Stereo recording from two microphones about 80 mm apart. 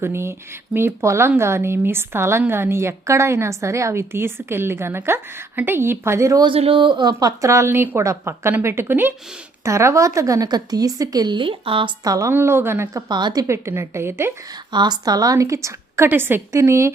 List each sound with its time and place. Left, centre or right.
0.0 s a woman's voice: right
6.4 s speech: right
7.1 s a woman's voice: right
9.6 s a woman's voice: right
10.5 s speech: right
12.0 s a woman's voice: right
12.3 s a woman's voice: right
13.1 s speech: right
13.5 s a woman's voice: right
14.7 s a woman's voice: right